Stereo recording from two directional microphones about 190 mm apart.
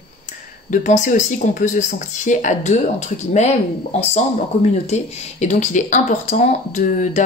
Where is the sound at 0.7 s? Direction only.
40° left (ahead or behind).